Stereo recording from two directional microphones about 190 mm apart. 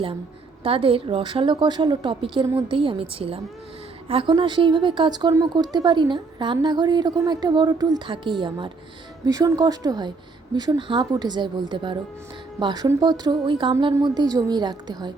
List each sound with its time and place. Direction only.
0.6 s speech: 30° right (ahead or behind)